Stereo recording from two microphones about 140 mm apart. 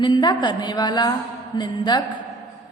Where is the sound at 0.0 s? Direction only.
30° left (ahead or behind).